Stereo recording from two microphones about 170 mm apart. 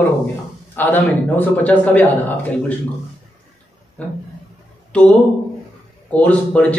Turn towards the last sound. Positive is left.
turn(degrees=10)  # may be behind; listen again after turning